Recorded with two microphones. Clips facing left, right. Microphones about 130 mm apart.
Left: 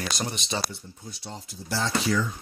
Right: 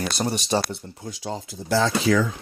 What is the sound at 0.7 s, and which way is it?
Speech, 90° right.